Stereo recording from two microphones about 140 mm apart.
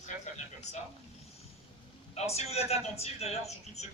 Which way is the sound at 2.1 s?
50° left (ahead or behind).